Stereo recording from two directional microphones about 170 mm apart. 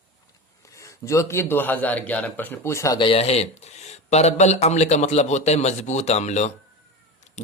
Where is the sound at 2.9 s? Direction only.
30° left (ahead or behind).